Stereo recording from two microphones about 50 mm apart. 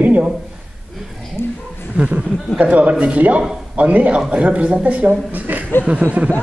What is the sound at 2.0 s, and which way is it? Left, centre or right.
A man's voice, right.